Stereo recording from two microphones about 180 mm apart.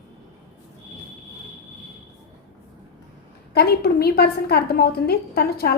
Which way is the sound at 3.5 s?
60° left (ahead or behind).